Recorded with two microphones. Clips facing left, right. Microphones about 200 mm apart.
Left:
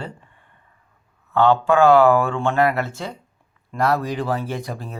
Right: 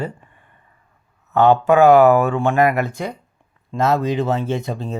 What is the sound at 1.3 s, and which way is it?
Speech, 20° right (ahead or behind).